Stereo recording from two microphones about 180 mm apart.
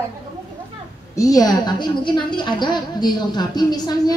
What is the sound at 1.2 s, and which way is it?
A woman's voice, 20° left (ahead or behind).